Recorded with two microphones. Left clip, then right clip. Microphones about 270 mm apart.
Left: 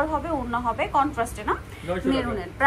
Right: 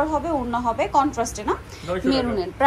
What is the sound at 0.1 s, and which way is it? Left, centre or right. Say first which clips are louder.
A woman's voice: right 3 dB; centre.